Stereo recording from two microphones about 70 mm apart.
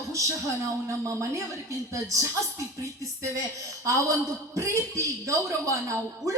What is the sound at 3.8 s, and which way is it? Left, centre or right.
A man's voice, right.